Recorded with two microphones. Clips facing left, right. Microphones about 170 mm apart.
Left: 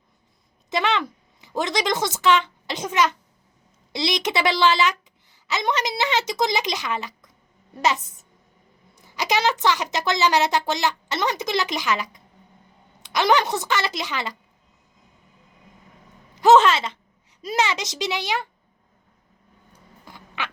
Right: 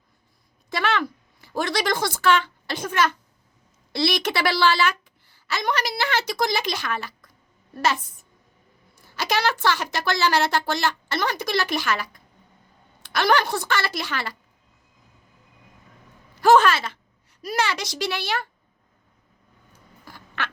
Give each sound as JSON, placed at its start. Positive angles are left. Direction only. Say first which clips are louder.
{"t": 0.7, "sound": "a woman's voice", "louder": "left 1 dB", "side_deg": 20}
{"t": 9.0, "sound": "a woman's voice", "louder": "left 1 dB", "side_deg": 15}
{"t": 16.3, "sound": "a woman's voice", "louder": "left 2 dB", "side_deg": 20}
{"t": 20.1, "sound": "a sound", "louder": "even", "side_deg": 15}